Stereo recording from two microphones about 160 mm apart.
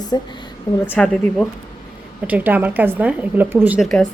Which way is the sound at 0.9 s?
5° left (ahead or behind).